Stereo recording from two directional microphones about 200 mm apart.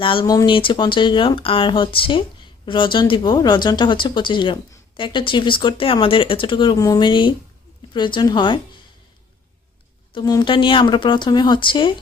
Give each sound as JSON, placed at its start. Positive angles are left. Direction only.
{"t": 0.0, "sound": "speech", "side_deg": 25}
{"t": 10.2, "sound": "speech", "side_deg": 20}